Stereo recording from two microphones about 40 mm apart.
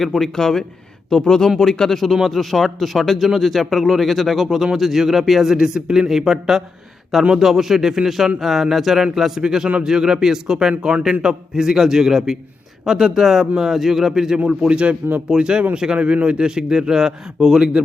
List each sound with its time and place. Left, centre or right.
0.0 s a man's voice: centre
14.7 s a man's voice: right